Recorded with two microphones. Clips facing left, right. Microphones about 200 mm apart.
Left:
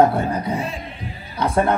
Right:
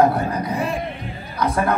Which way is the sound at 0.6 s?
60° right (ahead or behind).